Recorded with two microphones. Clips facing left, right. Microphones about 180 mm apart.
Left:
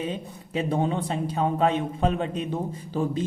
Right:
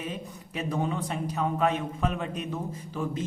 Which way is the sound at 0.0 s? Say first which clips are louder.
Left 5 dB; 30° left (ahead or behind).